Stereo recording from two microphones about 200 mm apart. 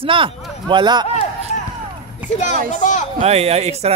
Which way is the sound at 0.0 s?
25° right (ahead or behind).